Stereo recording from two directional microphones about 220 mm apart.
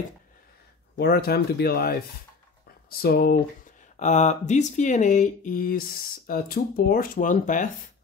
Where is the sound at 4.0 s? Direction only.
30° left (ahead or behind).